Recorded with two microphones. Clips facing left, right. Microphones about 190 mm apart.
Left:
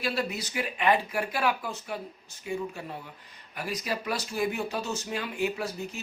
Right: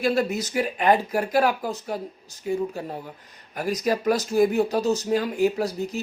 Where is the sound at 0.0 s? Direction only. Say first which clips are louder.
Right 8 dB; 45° right (ahead or behind).